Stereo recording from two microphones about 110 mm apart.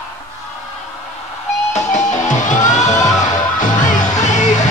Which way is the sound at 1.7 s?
90° left.